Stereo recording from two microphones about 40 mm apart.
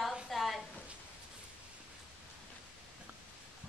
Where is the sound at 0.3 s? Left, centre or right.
Centre.